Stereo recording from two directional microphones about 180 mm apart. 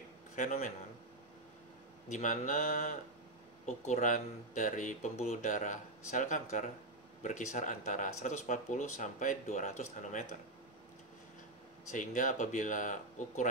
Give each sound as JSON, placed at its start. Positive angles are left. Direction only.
{"t": 0.4, "sound": "speech", "side_deg": 40}
{"t": 2.0, "sound": "speech", "side_deg": 45}
{"t": 11.9, "sound": "speech", "side_deg": 45}